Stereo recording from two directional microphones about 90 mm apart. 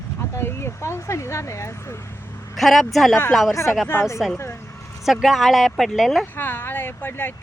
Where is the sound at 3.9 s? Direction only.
30° left (ahead or behind).